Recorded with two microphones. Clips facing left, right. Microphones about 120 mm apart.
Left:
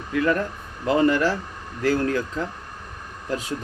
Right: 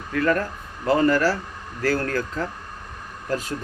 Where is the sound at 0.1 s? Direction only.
15° left (ahead or behind).